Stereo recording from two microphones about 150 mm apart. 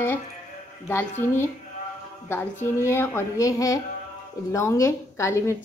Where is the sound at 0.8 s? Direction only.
15° left (ahead or behind).